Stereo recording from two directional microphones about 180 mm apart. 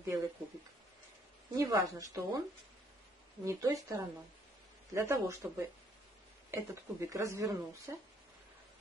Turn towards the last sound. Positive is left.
turn(degrees=-15)  # may be behind; listen again after turning